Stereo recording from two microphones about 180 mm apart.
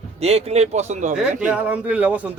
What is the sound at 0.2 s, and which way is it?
Speech, 35° right (ahead or behind).